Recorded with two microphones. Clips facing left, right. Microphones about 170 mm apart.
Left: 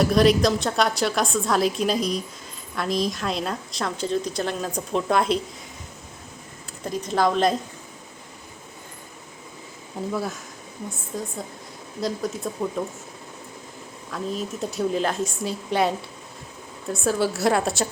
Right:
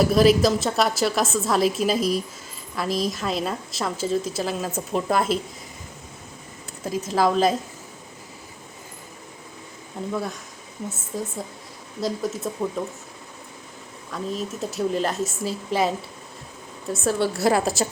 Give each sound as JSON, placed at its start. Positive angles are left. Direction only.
{"t": 0.0, "sound": "a woman's voice", "side_deg": 0}
{"t": 6.8, "sound": "a woman's voice", "side_deg": -5}
{"t": 10.1, "sound": "a woman's voice", "side_deg": 0}
{"t": 14.1, "sound": "a woman's voice", "side_deg": 0}